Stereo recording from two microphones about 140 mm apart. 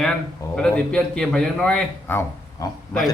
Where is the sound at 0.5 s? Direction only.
5° left (ahead or behind).